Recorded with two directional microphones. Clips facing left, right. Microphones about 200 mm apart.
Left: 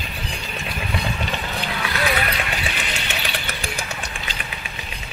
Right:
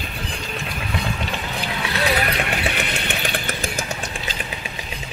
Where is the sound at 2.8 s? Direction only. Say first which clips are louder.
Right 3 dB; 55° right (ahead or behind).